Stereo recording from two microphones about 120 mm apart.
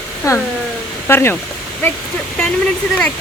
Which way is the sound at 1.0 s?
20° left (ahead or behind).